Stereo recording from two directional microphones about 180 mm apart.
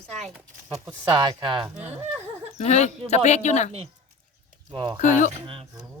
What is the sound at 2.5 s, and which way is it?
Speech, 40° left (ahead or behind).